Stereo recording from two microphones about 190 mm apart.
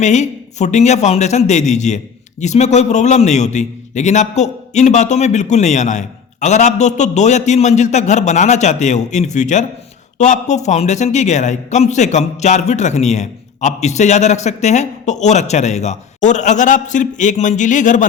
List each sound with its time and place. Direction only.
0.0 s a man's voice: 40° left (ahead or behind)